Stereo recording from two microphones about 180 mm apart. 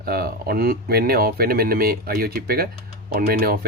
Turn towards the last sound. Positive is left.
turn(degrees=-60)  # may be behind; listen again after turning